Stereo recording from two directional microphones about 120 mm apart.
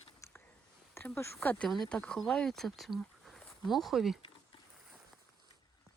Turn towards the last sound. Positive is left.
turn(degrees=0)  # may be behind; listen again after turning